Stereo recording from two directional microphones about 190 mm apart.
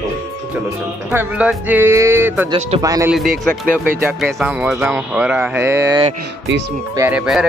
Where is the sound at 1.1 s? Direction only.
10° right (ahead or behind).